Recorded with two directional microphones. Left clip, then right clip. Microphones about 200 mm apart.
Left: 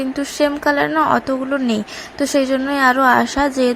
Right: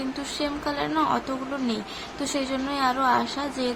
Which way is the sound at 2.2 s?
30° left (ahead or behind).